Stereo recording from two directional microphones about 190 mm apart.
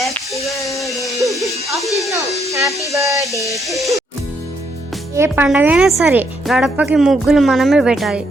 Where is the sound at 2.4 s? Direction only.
15° right (ahead or behind).